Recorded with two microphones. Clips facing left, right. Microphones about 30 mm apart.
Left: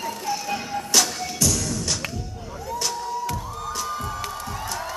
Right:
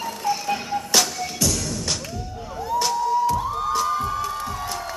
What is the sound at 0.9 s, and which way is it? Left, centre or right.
Music, centre.